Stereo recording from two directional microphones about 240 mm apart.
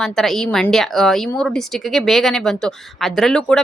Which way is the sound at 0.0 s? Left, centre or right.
Centre.